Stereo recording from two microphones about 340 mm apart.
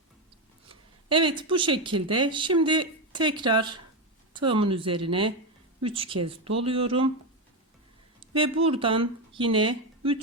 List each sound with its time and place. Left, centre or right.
0.7 s speech: centre
8.2 s a sound: centre
8.6 s speech: centre